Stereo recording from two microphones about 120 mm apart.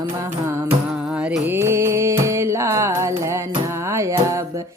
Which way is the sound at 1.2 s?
15° right (ahead or behind).